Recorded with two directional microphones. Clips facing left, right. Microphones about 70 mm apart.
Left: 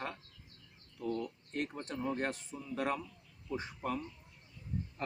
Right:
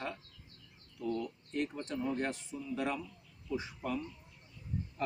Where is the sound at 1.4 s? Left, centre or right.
Left.